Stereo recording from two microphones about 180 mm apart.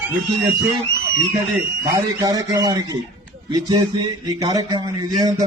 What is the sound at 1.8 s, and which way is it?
A man's voice, 20° right (ahead or behind).